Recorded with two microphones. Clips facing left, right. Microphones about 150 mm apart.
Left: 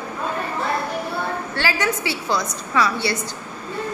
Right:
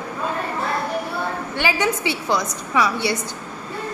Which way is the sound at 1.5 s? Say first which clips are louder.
Right 2 dB; 15° right (ahead or behind).